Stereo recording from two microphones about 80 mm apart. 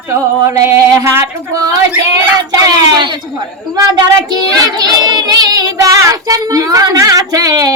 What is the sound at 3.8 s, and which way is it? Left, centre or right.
Child singing, right.